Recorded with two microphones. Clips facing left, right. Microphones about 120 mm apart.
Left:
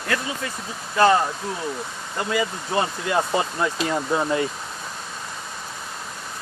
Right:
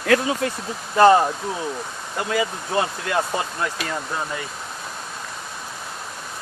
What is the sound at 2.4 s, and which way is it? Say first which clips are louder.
Speech: right 1 dB; centre (ahead or behind).